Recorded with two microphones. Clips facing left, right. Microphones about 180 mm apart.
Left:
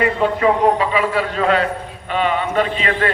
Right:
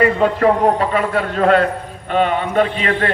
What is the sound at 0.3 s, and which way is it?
A man's voice, 55° right (ahead or behind).